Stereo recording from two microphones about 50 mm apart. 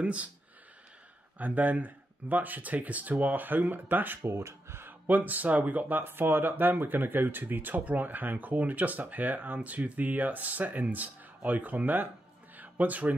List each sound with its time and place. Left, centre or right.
0.0 s speech: right
1.4 s speech: right
4.3 s speech: right
5.0 s speech: right
12.5 s music: right